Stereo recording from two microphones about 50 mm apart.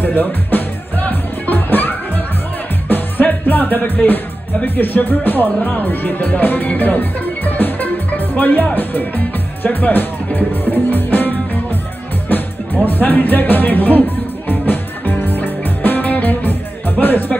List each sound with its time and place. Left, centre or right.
0.0 s music: left
4.6 s speech: left
6.8 s music: left
8.4 s speech: left
8.7 s music: left
17.0 s speech: left